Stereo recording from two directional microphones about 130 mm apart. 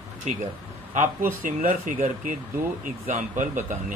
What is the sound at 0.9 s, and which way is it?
Speech, 85° right.